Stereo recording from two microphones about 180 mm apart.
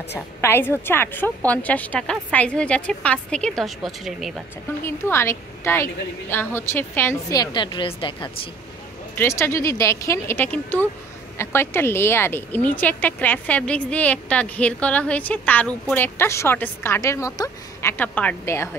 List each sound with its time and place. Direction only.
0.1 s speech: 15° left (ahead or behind)
4.8 s a woman's voice: 15° left (ahead or behind)
9.1 s speech: 15° left (ahead or behind)